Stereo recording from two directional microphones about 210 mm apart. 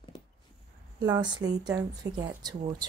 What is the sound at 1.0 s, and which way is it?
Speech, 20° right (ahead or behind).